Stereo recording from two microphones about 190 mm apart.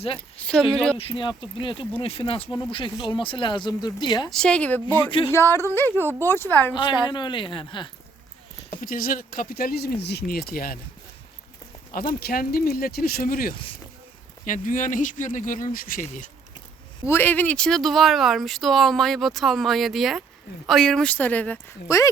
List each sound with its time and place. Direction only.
0.7 s speech: 5° left (ahead or behind)
0.9 s speech: 30° left (ahead or behind)
4.3 s speech: 5° left (ahead or behind)
5.9 s speech: 10° right (ahead or behind)
6.2 s speech: 10° left (ahead or behind)
6.7 s speech: 25° left (ahead or behind)
8.8 s speech: 50° left (ahead or behind)
12.2 s speech: 50° left (ahead or behind)
17.1 s speech: 10° left (ahead or behind)